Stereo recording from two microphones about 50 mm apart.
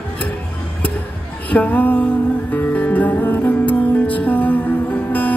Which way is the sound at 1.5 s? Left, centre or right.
Left.